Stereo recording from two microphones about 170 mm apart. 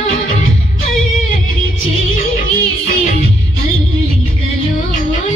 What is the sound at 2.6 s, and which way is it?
Music, 55° left (ahead or behind).